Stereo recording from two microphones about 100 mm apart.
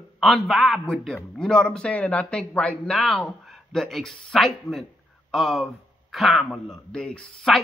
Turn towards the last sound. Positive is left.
turn(degrees=5)  # may be behind; listen again after turning